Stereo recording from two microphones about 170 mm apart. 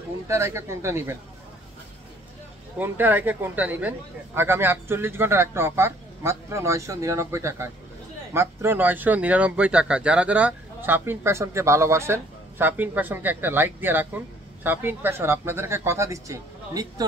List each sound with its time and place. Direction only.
0.3 s speech: 15° right (ahead or behind)
2.8 s speech: 10° right (ahead or behind)